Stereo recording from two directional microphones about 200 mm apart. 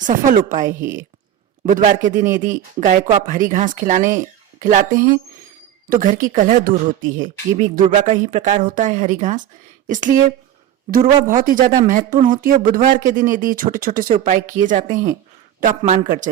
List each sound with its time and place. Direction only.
0.3 s speech: 40° right (ahead or behind)
0.7 s speech: 15° right (ahead or behind)
1.6 s speech: 40° right (ahead or behind)
10.9 s speech: 45° right (ahead or behind)